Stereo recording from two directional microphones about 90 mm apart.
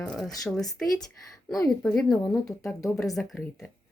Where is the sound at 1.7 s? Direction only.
5° left (ahead or behind).